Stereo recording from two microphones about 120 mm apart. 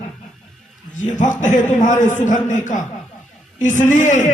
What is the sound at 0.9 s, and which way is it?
A man's voice, 90° left.